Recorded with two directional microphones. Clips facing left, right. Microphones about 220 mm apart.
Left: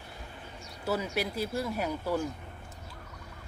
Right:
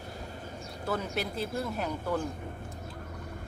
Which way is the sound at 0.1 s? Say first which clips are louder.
Right 4 dB; 40° right (ahead or behind).